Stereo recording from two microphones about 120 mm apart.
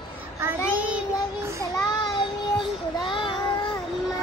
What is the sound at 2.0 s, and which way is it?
Child singing, 40° left (ahead or behind).